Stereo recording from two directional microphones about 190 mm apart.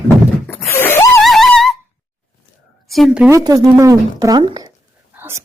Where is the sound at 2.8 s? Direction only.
Centre (ahead or behind).